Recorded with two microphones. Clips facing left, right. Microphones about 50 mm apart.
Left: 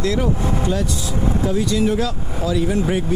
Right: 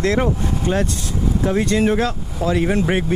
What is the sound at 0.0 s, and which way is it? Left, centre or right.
Speech, right.